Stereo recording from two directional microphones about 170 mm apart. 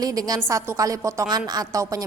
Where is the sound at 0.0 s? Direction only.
20° right (ahead or behind).